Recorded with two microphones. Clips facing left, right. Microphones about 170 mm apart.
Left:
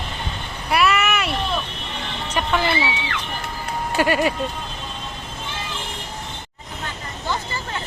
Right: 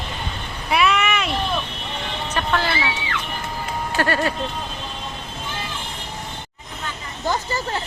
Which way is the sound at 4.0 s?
15° left (ahead or behind).